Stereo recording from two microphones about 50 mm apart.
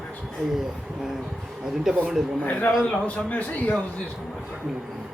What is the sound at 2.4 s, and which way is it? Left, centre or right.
A man's voice, left.